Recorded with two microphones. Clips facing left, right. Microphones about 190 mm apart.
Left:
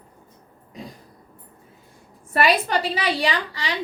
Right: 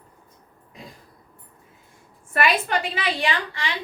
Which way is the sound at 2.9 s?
35° left (ahead or behind).